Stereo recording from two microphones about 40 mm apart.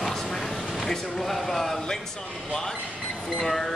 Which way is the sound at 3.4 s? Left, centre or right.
Centre.